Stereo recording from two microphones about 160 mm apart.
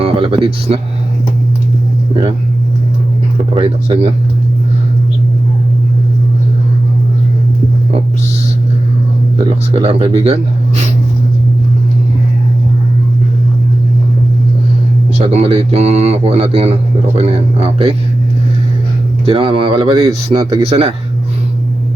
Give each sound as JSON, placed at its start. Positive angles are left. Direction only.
{"t": 0.0, "sound": "speech", "side_deg": -35}
{"t": 3.5, "sound": "speech", "side_deg": -40}
{"t": 9.7, "sound": "speech", "side_deg": -40}
{"t": 15.2, "sound": "speech", "side_deg": -40}
{"t": 19.2, "sound": "speech", "side_deg": -35}